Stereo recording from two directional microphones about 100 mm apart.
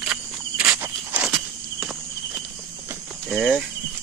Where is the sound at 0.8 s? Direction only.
15° right (ahead or behind).